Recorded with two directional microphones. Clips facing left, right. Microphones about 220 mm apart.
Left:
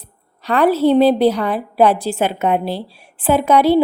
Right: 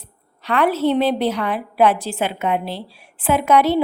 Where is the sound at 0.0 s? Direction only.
35° left (ahead or behind).